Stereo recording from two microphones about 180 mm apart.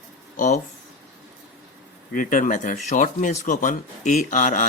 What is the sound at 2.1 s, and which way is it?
Speech, 45° left (ahead or behind).